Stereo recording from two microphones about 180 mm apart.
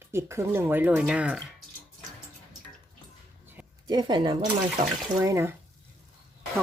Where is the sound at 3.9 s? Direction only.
25° right (ahead or behind).